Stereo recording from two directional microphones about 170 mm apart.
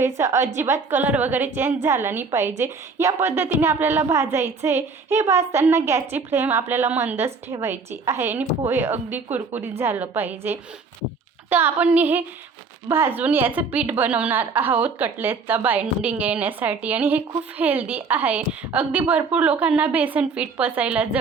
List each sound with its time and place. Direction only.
0.0 s a woman's voice: 15° right (ahead or behind)